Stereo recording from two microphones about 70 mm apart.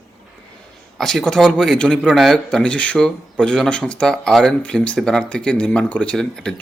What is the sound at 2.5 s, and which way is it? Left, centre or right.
Speech, centre.